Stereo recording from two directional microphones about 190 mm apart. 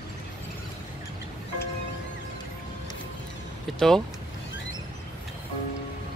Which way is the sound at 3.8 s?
Centre (ahead or behind).